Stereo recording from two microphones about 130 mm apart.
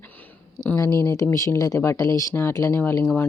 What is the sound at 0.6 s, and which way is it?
Speech, 10° left (ahead or behind).